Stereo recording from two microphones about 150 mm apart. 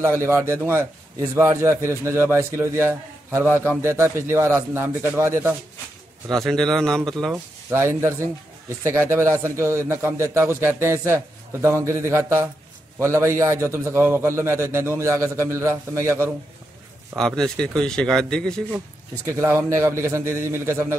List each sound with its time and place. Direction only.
0.0 s a man's voice: 20° right (ahead or behind)
6.3 s a man's voice: 5° left (ahead or behind)
7.7 s a man's voice: 15° right (ahead or behind)
17.1 s a man's voice: 5° left (ahead or behind)
19.2 s a man's voice: 20° right (ahead or behind)